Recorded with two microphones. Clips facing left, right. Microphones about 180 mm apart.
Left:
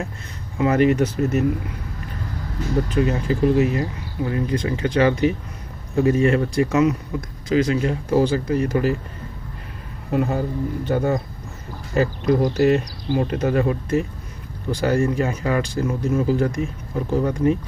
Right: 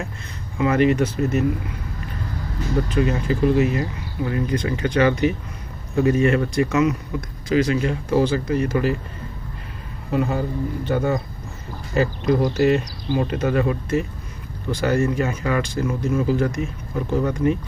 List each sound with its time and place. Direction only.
0.6 s speech: 40° left (ahead or behind)
2.9 s speech: 35° left (ahead or behind)
10.1 s speech: 45° left (ahead or behind)